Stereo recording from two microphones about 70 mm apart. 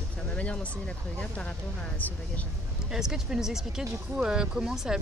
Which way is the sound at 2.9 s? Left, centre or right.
Centre.